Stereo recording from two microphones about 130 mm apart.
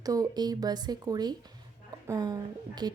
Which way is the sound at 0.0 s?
30° right (ahead or behind).